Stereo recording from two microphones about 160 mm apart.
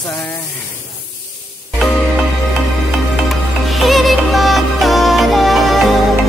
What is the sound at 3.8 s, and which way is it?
Music, centre (ahead or behind).